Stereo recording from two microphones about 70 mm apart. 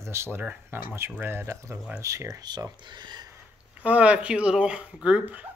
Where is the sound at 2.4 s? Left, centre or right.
Right.